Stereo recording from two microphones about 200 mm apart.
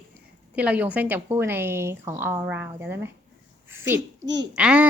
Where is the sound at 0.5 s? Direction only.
5° right (ahead or behind).